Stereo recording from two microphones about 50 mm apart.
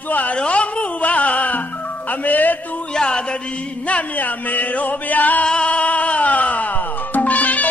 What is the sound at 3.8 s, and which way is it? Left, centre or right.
Music, left.